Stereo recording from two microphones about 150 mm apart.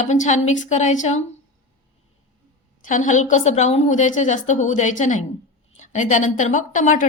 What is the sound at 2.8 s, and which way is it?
A woman's voice, 60° left (ahead or behind).